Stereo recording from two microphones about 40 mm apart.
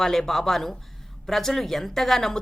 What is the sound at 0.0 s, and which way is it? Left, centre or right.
Speech, centre.